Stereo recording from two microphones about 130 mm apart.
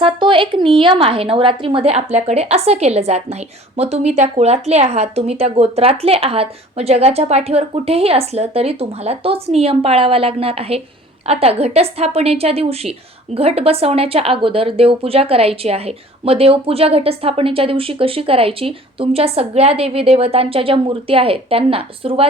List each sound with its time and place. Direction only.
0.0 s speech: 40° right (ahead or behind)